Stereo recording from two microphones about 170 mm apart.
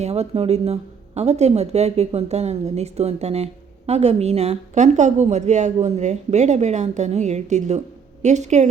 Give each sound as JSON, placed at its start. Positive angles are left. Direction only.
{"t": 0.0, "sound": "a woman's voice", "side_deg": -40}